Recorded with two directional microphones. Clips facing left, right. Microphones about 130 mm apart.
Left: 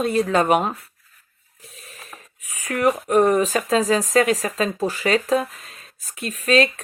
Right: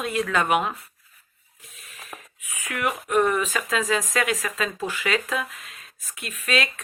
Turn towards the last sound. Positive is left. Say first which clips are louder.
# left 8 dB
turn(degrees=35)  # may be behind; listen again after turning